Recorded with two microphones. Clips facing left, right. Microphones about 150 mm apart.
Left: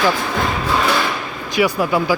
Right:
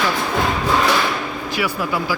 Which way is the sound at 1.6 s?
20° left (ahead or behind).